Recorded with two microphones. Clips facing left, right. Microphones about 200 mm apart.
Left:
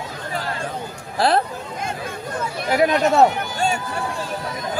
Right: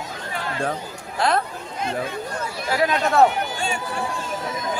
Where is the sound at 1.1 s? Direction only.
35° left (ahead or behind).